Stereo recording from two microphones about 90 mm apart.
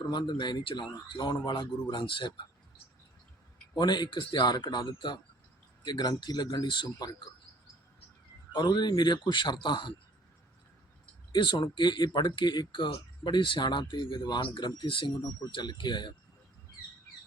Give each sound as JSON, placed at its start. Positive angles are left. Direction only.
{"t": 0.1, "sound": "speech", "side_deg": 55}
{"t": 3.8, "sound": "speech", "side_deg": 55}
{"t": 8.5, "sound": "speech", "side_deg": 55}
{"t": 11.3, "sound": "speech", "side_deg": 60}